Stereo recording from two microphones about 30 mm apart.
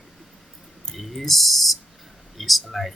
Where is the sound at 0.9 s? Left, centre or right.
Centre.